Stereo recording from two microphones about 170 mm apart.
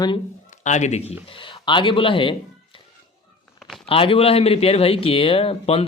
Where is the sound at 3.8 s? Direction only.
35° left (ahead or behind).